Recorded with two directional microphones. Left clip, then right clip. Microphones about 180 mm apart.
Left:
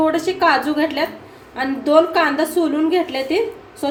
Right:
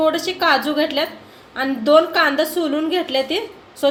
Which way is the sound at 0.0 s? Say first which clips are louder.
Even; 35° right (ahead or behind).